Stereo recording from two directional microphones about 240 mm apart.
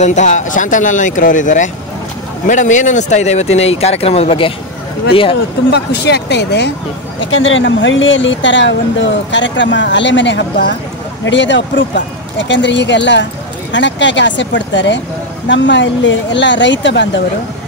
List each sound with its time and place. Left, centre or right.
0.0 s speech: left
5.7 s speech: left
7.2 s speech: left